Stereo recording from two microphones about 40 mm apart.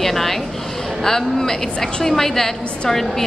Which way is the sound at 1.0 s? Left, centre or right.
Centre.